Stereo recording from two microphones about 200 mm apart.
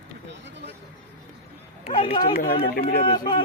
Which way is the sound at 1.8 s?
30° left (ahead or behind).